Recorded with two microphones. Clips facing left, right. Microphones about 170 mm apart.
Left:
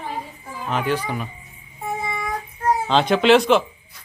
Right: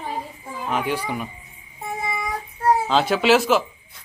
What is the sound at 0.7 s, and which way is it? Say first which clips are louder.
Speech: left 1 dB; 10° right (ahead or behind).